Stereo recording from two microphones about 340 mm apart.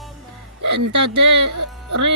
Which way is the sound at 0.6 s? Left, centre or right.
Right.